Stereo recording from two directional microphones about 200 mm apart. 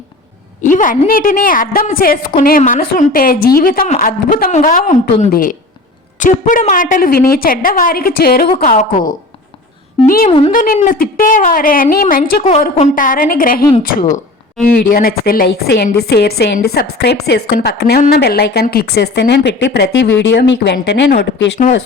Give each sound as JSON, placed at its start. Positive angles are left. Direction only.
{"t": 0.6, "sound": "a woman's voice", "side_deg": 40}
{"t": 8.4, "sound": "a woman's voice", "side_deg": 35}
{"t": 10.1, "sound": "a woman's voice", "side_deg": 45}
{"t": 14.8, "sound": "a woman's voice", "side_deg": 50}
{"t": 20.6, "sound": "a woman's voice", "side_deg": 50}
{"t": 21.6, "sound": "a woman's voice", "side_deg": 40}